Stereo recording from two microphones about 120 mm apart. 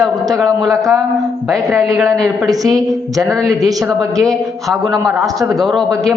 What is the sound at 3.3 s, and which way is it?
Speech, centre (ahead or behind).